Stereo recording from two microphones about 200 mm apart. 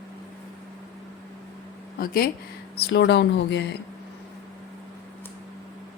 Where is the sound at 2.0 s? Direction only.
50° left (ahead or behind).